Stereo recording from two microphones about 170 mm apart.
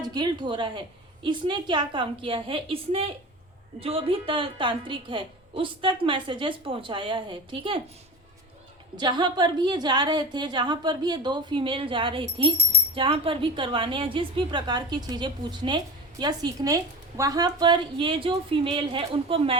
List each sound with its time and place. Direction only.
0.0 s a woman's voice: 25° right (ahead or behind)
9.0 s a woman's voice: 25° right (ahead or behind)